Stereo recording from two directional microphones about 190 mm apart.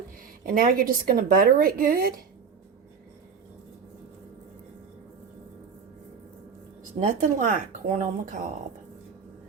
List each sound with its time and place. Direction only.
0.4 s a woman's voice: 50° right (ahead or behind)
7.1 s speech: 45° right (ahead or behind)